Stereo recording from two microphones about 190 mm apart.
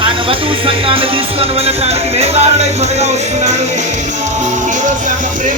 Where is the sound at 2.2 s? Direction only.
35° right (ahead or behind).